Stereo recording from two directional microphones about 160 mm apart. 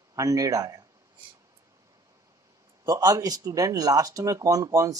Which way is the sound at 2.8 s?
25° right (ahead or behind).